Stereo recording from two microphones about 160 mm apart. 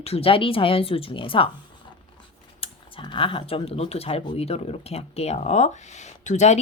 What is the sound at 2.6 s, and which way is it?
Speech, 30° left (ahead or behind).